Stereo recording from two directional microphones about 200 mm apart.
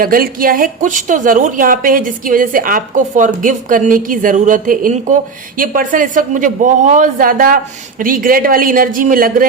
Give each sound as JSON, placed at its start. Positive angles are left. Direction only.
{"t": 0.0, "sound": "a woman's voice", "side_deg": -45}